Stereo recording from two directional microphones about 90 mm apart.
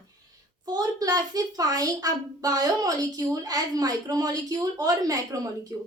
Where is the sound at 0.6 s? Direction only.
50° right (ahead or behind).